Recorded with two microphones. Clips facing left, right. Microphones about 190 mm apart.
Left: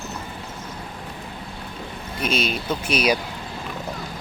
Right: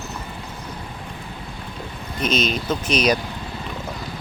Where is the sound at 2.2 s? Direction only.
10° left (ahead or behind).